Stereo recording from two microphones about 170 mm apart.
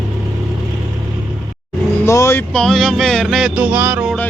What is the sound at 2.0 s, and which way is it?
Speech, 15° left (ahead or behind).